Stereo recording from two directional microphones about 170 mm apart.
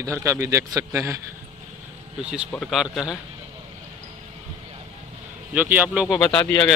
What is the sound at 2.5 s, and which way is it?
Speech, centre (ahead or behind).